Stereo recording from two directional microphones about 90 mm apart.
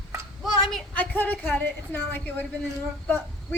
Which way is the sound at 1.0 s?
20° left (ahead or behind).